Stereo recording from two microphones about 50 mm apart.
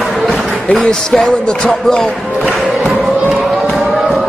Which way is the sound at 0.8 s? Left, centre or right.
Centre.